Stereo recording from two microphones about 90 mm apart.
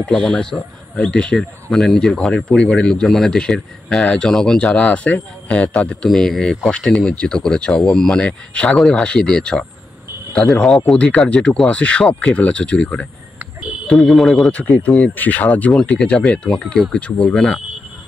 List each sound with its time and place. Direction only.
0.0 s speech: 10° left (ahead or behind)
14.5 s speech: 15° left (ahead or behind)
15.7 s speech: 5° left (ahead or behind)